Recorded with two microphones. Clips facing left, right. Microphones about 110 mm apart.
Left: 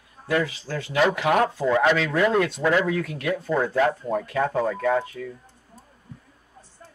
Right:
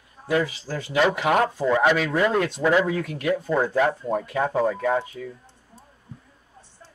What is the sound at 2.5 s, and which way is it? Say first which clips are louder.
A man's voice: right 1 dB; 15° right (ahead or behind).